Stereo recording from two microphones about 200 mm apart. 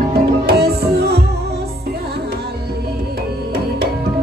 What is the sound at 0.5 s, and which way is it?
Music, 50° right (ahead or behind).